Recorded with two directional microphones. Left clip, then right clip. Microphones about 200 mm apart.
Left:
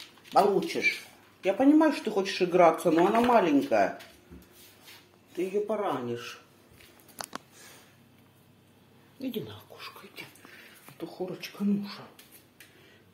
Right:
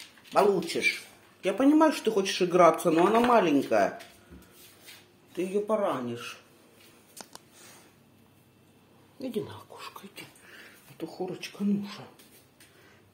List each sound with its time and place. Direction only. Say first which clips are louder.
0.7 s speech: even; 25° right (ahead or behind)
5.3 s speech: even; 35° right (ahead or behind)
5.7 s speech: right 2 dB; 20° right (ahead or behind)
9.2 s whispering: right 2 dB; 20° right (ahead or behind)
10.6 s speech: right 2 dB; 25° right (ahead or behind)